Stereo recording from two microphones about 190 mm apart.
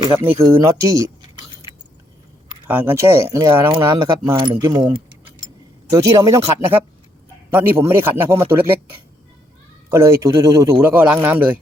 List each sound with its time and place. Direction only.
0.1 s speech: 10° right (ahead or behind)
2.6 s speech: 10° right (ahead or behind)
7.5 s speech: 10° right (ahead or behind)
9.9 s speech: 15° right (ahead or behind)
10.8 s speech: 5° right (ahead or behind)